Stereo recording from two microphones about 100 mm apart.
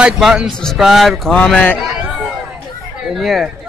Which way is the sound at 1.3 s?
10° left (ahead or behind).